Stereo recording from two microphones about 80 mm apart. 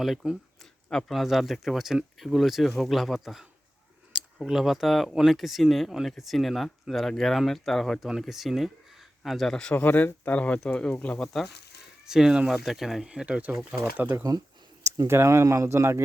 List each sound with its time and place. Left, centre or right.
0.0 s speech: centre
4.4 s speech: centre
9.5 s speech: centre
9.7 s speech: left
11.3 s speech: centre; by 14.2 s right
14.2 s speech: right
14.8 s speech: right